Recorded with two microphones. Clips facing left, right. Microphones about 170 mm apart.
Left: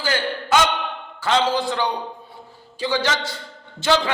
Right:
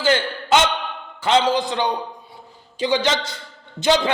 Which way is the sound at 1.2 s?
20° right (ahead or behind).